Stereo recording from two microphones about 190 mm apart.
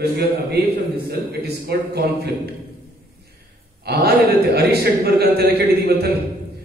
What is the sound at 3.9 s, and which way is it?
A man's voice, 55° right (ahead or behind).